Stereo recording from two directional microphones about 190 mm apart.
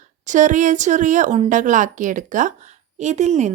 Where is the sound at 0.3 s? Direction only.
40° right (ahead or behind).